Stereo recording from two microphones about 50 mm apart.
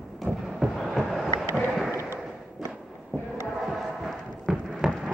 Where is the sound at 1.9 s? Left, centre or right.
Right.